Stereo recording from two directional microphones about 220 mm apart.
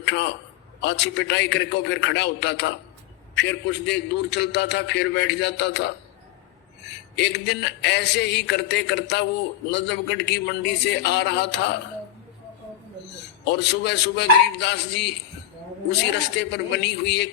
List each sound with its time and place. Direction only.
0.0 s a man's voice: 50° left (ahead or behind)
7.2 s a man's voice: 50° left (ahead or behind)
13.4 s a man's voice: 50° left (ahead or behind)
16.4 s a man's voice: 50° left (ahead or behind)